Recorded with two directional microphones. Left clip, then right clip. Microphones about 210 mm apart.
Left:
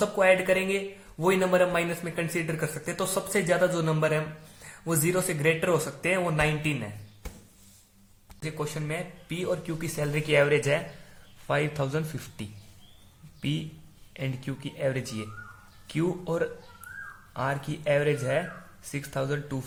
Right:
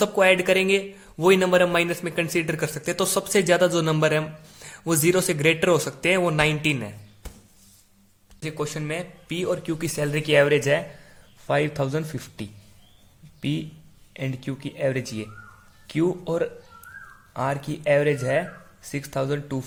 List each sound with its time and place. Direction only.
0.0 s a man's voice: 40° right (ahead or behind)
8.4 s a man's voice: 35° right (ahead or behind)